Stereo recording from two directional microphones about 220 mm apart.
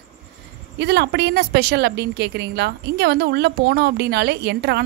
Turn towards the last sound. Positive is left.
turn(degrees=-50)  # may be behind; listen again after turning